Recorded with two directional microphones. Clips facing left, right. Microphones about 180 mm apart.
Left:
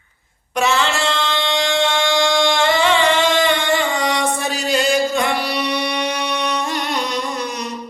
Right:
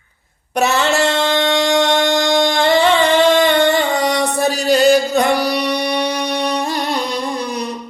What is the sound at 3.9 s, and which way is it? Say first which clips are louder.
Music: right 3 dB; 35° right (ahead or behind).